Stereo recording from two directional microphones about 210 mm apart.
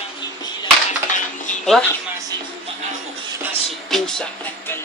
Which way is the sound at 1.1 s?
35° left (ahead or behind).